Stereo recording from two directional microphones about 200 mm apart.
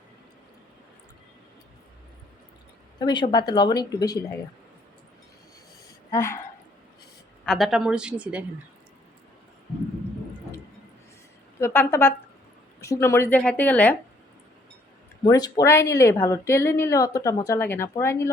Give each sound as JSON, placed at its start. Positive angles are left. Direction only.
{"t": 3.0, "sound": "a woman's voice", "side_deg": 20}
{"t": 6.1, "sound": "a woman's voice", "side_deg": 15}
{"t": 7.4, "sound": "a woman's voice", "side_deg": 0}
{"t": 11.6, "sound": "speech", "side_deg": 10}
{"t": 15.2, "sound": "speech", "side_deg": 20}